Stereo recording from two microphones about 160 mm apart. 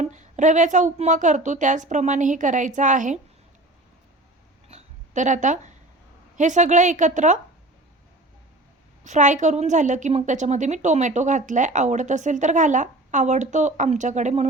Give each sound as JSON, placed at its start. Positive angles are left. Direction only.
{"t": 0.0, "sound": "a woman's voice", "side_deg": -50}
{"t": 4.7, "sound": "a sound", "side_deg": -50}
{"t": 6.3, "sound": "a woman's voice", "side_deg": -50}
{"t": 9.0, "sound": "a woman's voice", "side_deg": -50}